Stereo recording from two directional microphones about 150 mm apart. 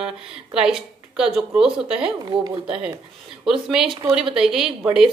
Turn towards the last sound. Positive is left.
turn(degrees=-5)  # may be behind; listen again after turning